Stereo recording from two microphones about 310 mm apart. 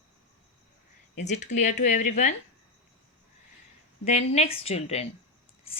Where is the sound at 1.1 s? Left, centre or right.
Left.